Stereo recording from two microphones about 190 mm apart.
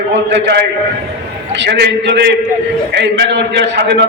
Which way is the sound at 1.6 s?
60° right (ahead or behind).